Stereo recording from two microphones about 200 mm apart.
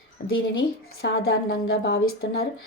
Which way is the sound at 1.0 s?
50° left (ahead or behind).